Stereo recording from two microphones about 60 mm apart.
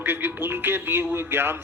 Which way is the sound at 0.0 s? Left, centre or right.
Right.